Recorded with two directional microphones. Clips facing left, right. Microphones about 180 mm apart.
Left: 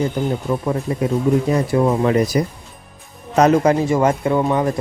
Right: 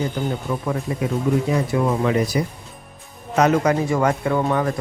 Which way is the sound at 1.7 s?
40° left (ahead or behind).